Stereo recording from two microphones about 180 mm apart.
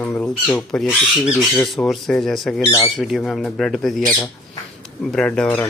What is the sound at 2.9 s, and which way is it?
Speech, centre (ahead or behind).